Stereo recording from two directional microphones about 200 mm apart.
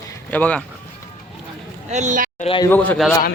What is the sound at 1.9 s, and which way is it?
Speech, 40° right (ahead or behind).